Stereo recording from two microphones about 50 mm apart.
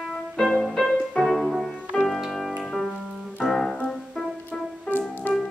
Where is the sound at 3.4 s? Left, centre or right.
Centre.